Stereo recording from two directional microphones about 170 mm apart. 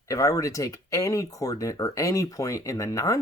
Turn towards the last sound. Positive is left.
turn(degrees=20)  # may be behind; listen again after turning